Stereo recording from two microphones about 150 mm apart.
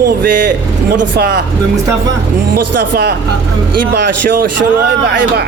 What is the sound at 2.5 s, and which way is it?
Speech, 90° right.